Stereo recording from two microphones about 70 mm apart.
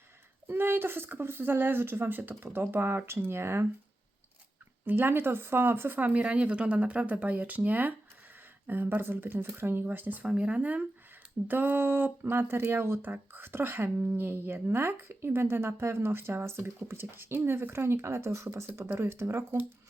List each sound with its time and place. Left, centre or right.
0.4 s speech: right
4.9 s speech: right
10.2 s speech: centre; by 19.6 s right